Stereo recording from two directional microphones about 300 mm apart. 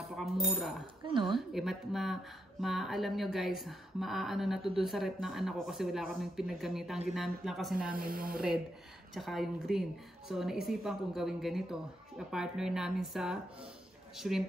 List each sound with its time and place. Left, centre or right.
0.1 s speech: centre
1.0 s speech: centre
1.5 s a woman's voice: centre
7.9 s speech: right
9.1 s a woman's voice: centre